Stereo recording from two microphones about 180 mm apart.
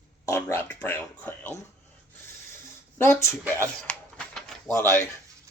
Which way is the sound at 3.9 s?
5° left (ahead or behind).